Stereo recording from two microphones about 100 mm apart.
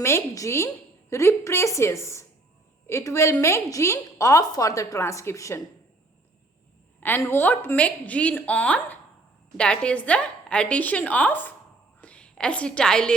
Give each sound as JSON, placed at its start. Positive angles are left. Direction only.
{"t": 0.0, "sound": "a woman's voice", "side_deg": 30}
{"t": 7.2, "sound": "a woman's voice", "side_deg": 25}